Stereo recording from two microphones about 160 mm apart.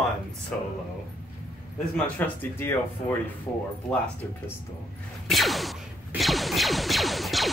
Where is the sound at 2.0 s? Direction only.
10° left (ahead or behind).